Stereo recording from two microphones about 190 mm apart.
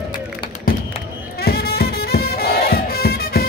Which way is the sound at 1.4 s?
55° left (ahead or behind).